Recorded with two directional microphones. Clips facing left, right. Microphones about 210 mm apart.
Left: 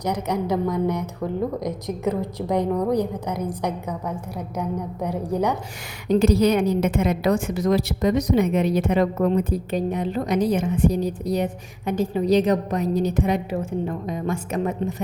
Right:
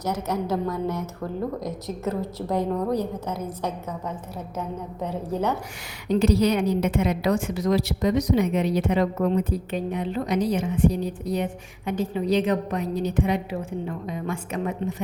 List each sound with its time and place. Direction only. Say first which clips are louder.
0.0 s a woman's voice: left 2 dB; 15° left (ahead or behind)
6.1 s a woman's voice: left 3 dB; 45° left (ahead or behind)